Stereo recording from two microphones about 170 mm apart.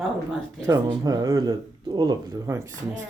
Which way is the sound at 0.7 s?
20° right (ahead or behind).